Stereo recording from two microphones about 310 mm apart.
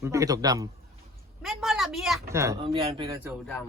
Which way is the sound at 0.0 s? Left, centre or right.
Centre.